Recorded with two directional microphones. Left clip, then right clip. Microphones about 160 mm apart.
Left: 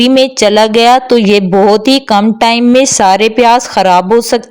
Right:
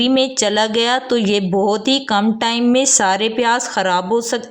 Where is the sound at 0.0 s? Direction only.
40° left (ahead or behind).